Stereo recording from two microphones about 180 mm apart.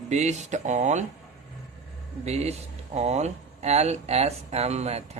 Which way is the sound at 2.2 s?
35° right (ahead or behind).